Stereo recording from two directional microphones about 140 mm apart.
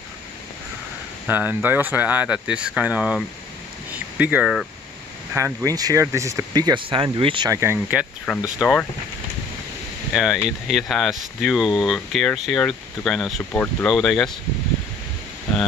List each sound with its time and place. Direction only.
1.2 s speech: 15° right (ahead or behind)
3.9 s a sound: 10° right (ahead or behind)
5.3 s speech: 20° right (ahead or behind); by 7.4 s 40° right (ahead or behind)
7.4 s speech: 20° right (ahead or behind); by 8.8 s 5° right (ahead or behind)
10.1 s speech: 5° right (ahead or behind)